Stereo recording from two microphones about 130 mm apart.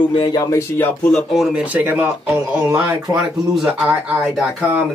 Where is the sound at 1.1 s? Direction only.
Centre (ahead or behind).